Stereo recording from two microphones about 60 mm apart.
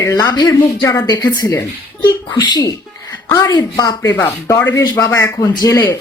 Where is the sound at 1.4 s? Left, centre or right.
Left.